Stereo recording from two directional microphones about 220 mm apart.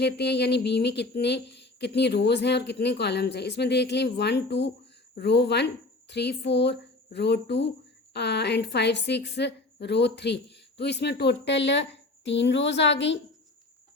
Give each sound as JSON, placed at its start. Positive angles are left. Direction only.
{"t": 0.0, "sound": "a woman's voice", "side_deg": 50}